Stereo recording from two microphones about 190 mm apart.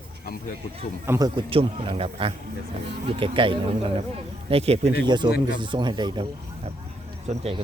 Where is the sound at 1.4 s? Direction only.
30° right (ahead or behind).